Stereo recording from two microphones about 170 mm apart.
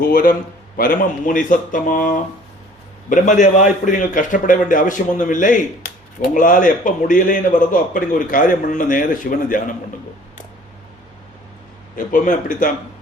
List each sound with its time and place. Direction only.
0.1 s a man's voice: 60° left (ahead or behind)
11.9 s a man's voice: 50° left (ahead or behind)